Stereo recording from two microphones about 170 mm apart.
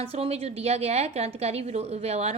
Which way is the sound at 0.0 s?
35° right (ahead or behind).